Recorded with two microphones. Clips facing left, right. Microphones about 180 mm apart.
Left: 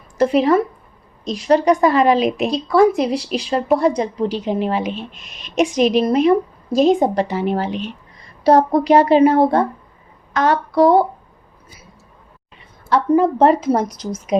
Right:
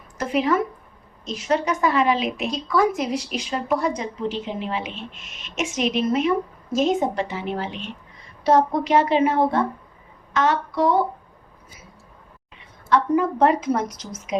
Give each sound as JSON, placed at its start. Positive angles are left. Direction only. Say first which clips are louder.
{"t": 0.2, "sound": "a woman's voice", "louder": "left 7 dB", "side_deg": 35}
{"t": 12.9, "sound": "a woman's voice", "louder": "left 5 dB", "side_deg": 35}